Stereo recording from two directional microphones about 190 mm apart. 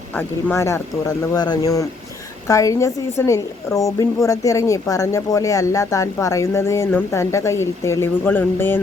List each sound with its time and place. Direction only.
0.2 s a woman's voice: 10° left (ahead or behind)